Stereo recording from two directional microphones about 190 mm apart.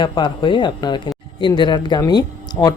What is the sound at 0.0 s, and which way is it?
Speech, 25° left (ahead or behind).